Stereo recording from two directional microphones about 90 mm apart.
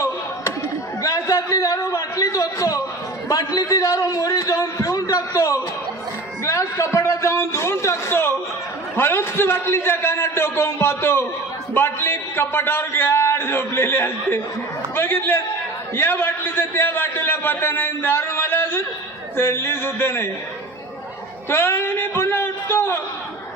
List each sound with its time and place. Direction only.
1.0 s a sound: 40° left (ahead or behind)
3.3 s a man's voice: 40° left (ahead or behind)
21.5 s a man's voice: 25° left (ahead or behind)